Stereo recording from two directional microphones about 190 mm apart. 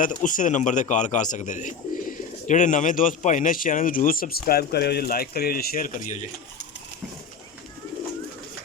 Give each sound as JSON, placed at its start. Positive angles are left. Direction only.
{"t": 0.0, "sound": "a man's voice", "side_deg": 45}